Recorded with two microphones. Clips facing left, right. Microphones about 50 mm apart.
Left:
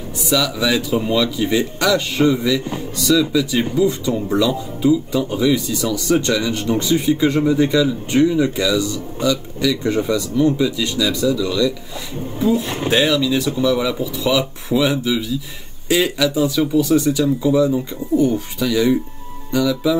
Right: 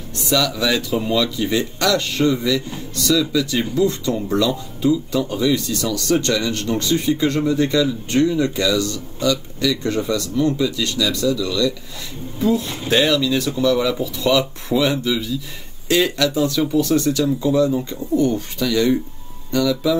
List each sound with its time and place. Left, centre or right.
0.2 s speech: centre
4.8 s speech: left